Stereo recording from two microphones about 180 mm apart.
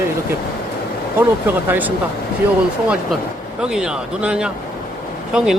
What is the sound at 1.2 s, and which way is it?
Speech, 10° right (ahead or behind).